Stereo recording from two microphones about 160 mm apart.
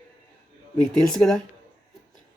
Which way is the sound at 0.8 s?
5° left (ahead or behind).